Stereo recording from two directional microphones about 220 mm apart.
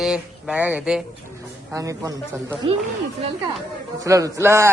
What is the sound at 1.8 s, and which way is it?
Speech, 15° right (ahead or behind).